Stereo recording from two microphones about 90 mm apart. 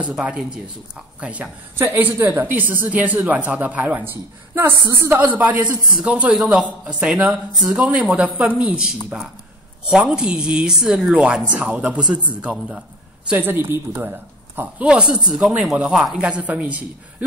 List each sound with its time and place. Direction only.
0.0 s speech: 15° right (ahead or behind)